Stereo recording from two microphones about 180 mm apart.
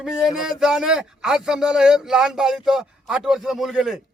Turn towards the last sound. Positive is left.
turn(degrees=0)  # may be behind; listen again after turning